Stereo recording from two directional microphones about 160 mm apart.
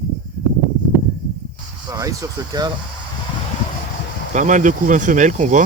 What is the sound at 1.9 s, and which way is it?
Speech, 20° right (ahead or behind).